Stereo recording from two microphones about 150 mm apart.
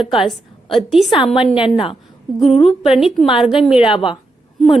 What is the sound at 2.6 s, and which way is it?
A woman's voice, 40° left (ahead or behind).